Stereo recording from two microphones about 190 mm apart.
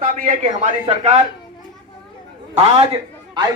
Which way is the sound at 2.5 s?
30° right (ahead or behind).